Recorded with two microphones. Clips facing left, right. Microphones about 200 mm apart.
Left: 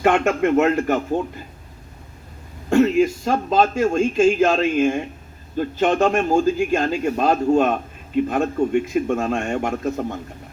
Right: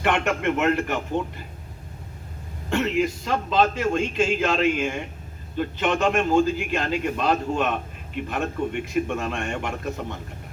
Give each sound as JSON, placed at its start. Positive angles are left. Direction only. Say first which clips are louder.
{"t": 0.0, "sound": "a man's voice", "louder": "left 6 dB", "side_deg": 40}
{"t": 2.6, "sound": "a man's voice", "louder": "left 7 dB", "side_deg": 45}